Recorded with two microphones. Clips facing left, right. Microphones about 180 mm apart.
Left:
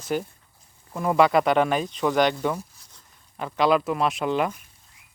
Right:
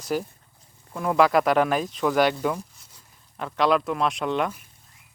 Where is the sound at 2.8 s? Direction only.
10° right (ahead or behind).